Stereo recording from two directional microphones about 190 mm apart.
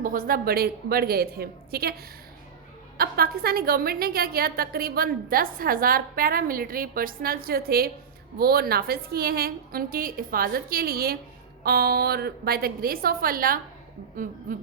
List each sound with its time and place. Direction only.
0.0 s a woman's voice: 45° right (ahead or behind)
3.0 s a woman's voice: 55° right (ahead or behind)